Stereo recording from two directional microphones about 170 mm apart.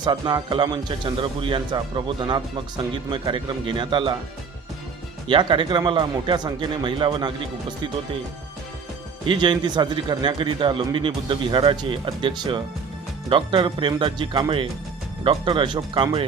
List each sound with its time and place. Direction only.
0.0 s speech: 25° right (ahead or behind)
5.3 s speech: 30° right (ahead or behind)
9.2 s speech: 30° right (ahead or behind)